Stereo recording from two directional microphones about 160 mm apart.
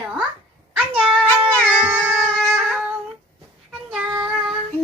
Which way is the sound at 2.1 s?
5° left (ahead or behind).